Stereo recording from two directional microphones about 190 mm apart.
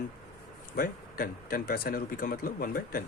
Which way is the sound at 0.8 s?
50° left (ahead or behind).